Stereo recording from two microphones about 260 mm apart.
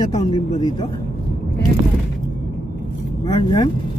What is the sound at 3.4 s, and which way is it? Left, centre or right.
Speech, centre.